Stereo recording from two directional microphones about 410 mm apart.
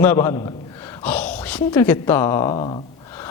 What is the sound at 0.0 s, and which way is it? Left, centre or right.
A woman's voice, centre.